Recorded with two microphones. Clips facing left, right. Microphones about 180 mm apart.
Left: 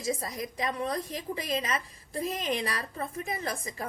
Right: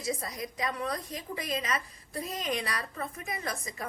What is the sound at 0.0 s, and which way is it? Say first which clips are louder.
A woman's voice: left 2 dB; 30° left (ahead or behind).